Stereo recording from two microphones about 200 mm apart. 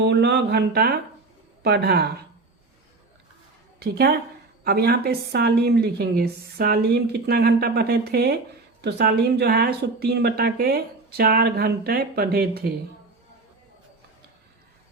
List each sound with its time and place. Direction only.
0.0 s speech: 60° right (ahead or behind)
3.8 s a woman's voice: 50° right (ahead or behind)